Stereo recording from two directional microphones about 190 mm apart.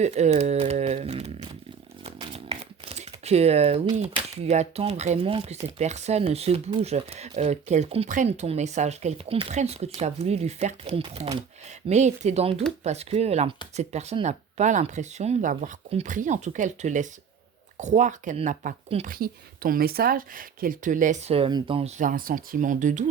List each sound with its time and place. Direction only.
0.0 s speech: 35° right (ahead or behind)
2.0 s a sound: 30° right (ahead or behind)
4.0 s speech: 35° right (ahead or behind)
19.0 s speech: 50° right (ahead or behind)